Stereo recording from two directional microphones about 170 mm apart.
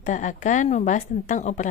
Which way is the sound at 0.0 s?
50° left (ahead or behind).